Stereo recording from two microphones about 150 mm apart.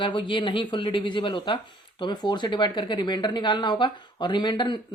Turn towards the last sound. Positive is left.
turn(degrees=30)  # may be behind; listen again after turning